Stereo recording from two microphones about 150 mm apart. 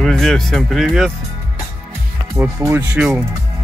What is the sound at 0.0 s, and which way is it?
Speech, centre (ahead or behind).